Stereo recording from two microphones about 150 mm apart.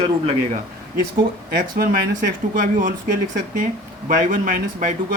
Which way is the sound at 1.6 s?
80° right.